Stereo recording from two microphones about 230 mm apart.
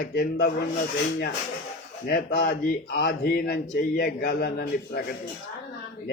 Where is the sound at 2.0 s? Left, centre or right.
Left.